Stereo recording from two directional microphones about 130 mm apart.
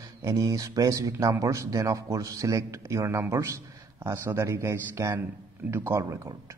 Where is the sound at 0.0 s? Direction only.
25° right (ahead or behind).